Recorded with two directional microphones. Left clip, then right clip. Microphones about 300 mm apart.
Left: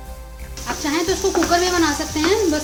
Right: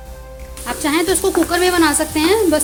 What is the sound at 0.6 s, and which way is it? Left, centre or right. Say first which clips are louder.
Sizzle: right 4 dB; right.